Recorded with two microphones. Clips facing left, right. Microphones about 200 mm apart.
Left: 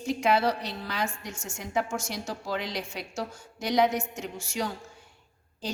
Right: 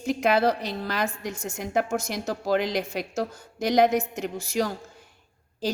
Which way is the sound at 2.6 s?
75° right (ahead or behind).